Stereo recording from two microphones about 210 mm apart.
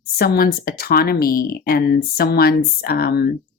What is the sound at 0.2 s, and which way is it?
A woman's voice, 45° left (ahead or behind).